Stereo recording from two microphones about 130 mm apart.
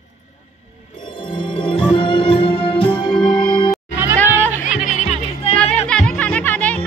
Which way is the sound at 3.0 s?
5° left (ahead or behind).